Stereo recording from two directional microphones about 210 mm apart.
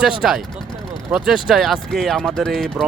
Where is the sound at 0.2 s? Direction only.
Centre (ahead or behind).